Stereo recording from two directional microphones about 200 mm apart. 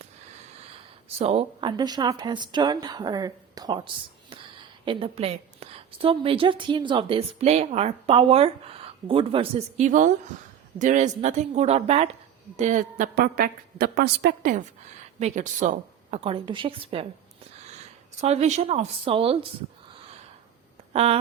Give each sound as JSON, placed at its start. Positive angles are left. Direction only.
{"t": 1.2, "sound": "a woman's voice", "side_deg": -30}
{"t": 4.9, "sound": "a woman's voice", "side_deg": -25}
{"t": 15.2, "sound": "speech", "side_deg": -40}
{"t": 18.2, "sound": "speech", "side_deg": -35}
{"t": 20.9, "sound": "speech", "side_deg": -30}